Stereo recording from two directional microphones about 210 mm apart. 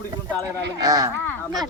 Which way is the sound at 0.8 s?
15° right (ahead or behind).